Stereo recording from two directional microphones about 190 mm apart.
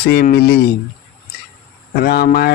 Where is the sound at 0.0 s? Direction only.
55° left (ahead or behind).